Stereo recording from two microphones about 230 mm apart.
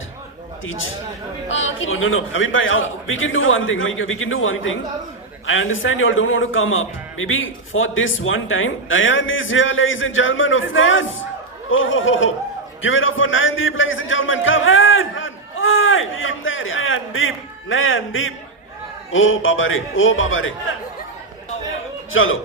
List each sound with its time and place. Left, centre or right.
0.6 s a man's voice: left
22.1 s speech: left